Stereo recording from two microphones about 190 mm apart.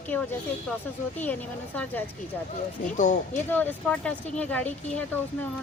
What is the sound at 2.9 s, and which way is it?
Speech, 40° left (ahead or behind).